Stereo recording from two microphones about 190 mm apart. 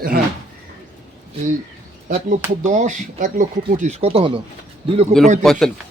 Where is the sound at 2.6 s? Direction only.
40° right (ahead or behind).